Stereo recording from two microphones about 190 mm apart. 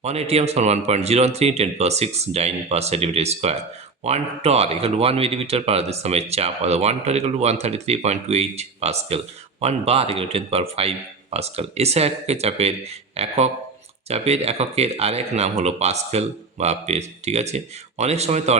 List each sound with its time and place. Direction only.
0.0 s speech: 35° right (ahead or behind)